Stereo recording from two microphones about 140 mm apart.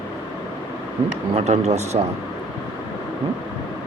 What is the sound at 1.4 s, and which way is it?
Speech, 50° right (ahead or behind).